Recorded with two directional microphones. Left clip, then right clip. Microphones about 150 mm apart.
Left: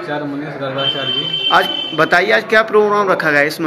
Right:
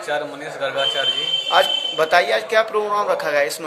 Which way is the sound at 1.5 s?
10° right (ahead or behind).